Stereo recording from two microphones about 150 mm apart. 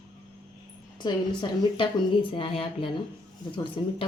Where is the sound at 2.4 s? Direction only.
40° left (ahead or behind).